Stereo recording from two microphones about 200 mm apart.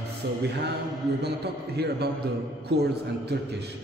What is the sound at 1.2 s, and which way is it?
Speech, 55° right (ahead or behind).